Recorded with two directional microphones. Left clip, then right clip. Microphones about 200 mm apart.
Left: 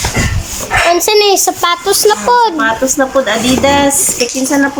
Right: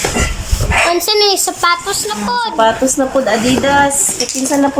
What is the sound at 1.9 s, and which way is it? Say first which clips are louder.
Speech: left 8 dB; 35° left (ahead or behind).